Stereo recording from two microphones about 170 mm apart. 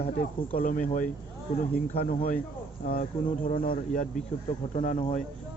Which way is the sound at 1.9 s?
55° left (ahead or behind).